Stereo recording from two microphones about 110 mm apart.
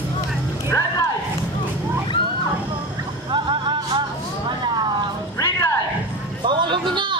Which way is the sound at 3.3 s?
45° right (ahead or behind).